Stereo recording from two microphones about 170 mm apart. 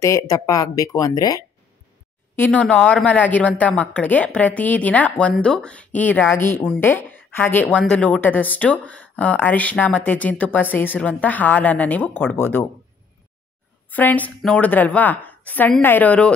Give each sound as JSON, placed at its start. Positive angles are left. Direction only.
{"t": 0.0, "sound": "speech", "side_deg": 20}
{"t": 2.3, "sound": "a woman's voice", "side_deg": 10}
{"t": 13.8, "sound": "a woman's voice", "side_deg": 10}